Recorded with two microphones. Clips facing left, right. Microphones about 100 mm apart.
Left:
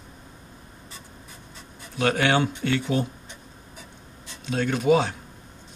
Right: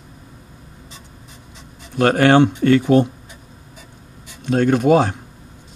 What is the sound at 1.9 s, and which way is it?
Speech, 50° right (ahead or behind).